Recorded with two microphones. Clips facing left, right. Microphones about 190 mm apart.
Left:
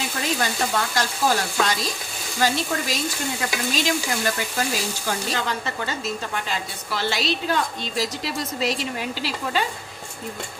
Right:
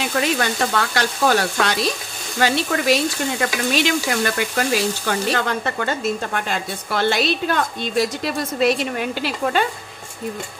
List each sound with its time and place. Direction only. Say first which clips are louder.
0.0 s frying: right 5 dB; 70° right (ahead or behind)
3.7 s speech: right 4 dB; 65° right (ahead or behind)